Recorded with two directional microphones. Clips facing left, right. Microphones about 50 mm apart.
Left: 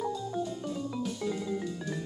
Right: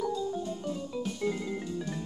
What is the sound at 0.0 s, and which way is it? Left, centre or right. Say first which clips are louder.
Music: right 2 dB; left.